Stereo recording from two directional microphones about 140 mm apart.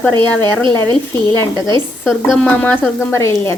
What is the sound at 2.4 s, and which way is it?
Speech, 10° left (ahead or behind).